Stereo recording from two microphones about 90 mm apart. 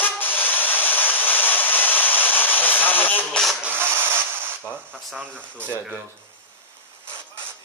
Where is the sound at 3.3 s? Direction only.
5° left (ahead or behind).